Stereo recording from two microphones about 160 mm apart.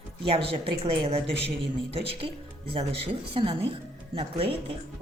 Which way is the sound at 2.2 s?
30° right (ahead or behind).